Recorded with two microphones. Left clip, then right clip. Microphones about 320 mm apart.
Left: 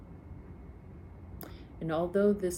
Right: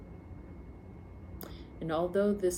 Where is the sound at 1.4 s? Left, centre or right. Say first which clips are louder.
Left 1 dB; centre.